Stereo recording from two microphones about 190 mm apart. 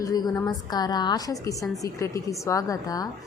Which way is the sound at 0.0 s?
20° left (ahead or behind).